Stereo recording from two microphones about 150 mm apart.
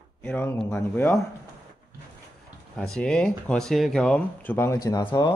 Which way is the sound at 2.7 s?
5° left (ahead or behind).